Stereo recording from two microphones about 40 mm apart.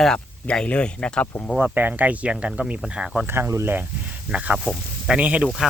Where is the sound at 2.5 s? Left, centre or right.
Right.